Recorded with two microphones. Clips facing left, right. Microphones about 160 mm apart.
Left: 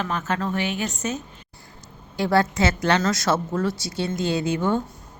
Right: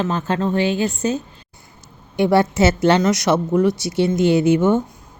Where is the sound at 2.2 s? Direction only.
25° right (ahead or behind).